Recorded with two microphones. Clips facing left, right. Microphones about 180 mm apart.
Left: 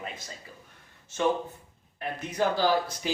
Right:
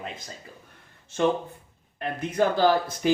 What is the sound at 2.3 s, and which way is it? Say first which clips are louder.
Speech: right 4 dB; 55° right (ahead or behind).